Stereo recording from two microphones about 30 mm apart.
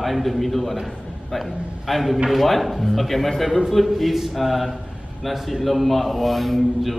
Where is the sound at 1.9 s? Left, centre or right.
Centre.